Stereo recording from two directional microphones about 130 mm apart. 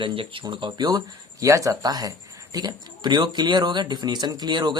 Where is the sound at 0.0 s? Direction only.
40° right (ahead or behind).